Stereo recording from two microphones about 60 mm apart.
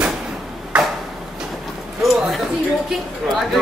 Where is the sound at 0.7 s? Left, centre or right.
Centre.